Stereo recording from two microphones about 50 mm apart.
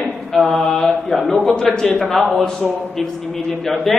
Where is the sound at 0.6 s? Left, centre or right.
Centre.